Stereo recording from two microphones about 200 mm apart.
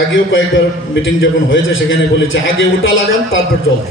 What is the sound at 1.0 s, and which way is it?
A man's voice, 75° left (ahead or behind).